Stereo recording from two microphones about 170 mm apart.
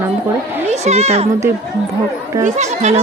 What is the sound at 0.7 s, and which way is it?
Speech, 40° right (ahead or behind).